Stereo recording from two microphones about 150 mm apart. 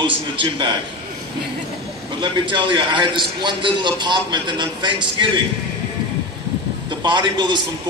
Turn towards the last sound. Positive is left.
turn(degrees=-30)  # may be behind; listen again after turning